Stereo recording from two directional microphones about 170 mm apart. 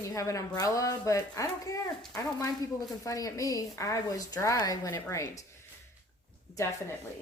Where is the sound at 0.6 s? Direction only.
20° left (ahead or behind).